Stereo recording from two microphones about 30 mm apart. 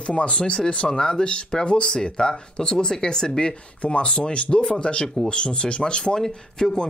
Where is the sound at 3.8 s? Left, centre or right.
Left.